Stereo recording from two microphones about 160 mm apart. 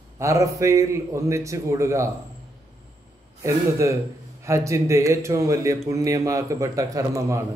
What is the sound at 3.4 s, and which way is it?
A man's voice, 20° right (ahead or behind).